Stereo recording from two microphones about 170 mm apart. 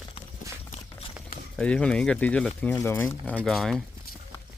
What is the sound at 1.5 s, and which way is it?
Speech, 5° left (ahead or behind).